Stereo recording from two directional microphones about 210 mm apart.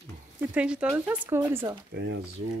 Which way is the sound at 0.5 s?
5° right (ahead or behind).